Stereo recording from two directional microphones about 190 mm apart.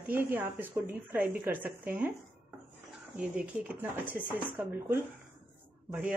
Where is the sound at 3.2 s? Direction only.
5° right (ahead or behind).